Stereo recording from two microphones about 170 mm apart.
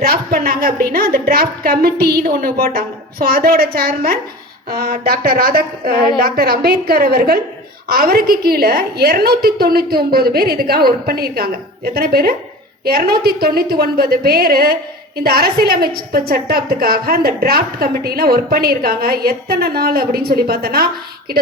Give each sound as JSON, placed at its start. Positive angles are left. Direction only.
{"t": 0.0, "sound": "a woman's voice", "side_deg": -60}